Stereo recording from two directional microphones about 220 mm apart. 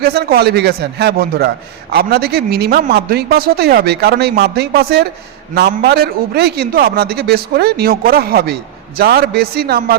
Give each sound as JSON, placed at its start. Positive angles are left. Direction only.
{"t": 0.0, "sound": "a man's voice", "side_deg": -45}